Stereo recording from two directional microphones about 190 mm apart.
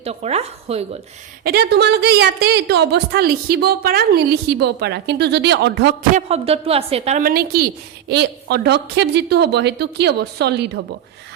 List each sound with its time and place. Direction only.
0.0 s a woman's voice: 35° right (ahead or behind)
1.5 s a woman's voice: 60° right (ahead or behind)
6.1 s a woman's voice: 30° right (ahead or behind)
7.2 s a woman's voice: 50° right (ahead or behind)